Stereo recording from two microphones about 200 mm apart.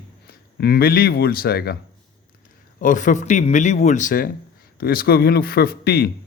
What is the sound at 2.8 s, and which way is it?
A man's voice, 40° left (ahead or behind).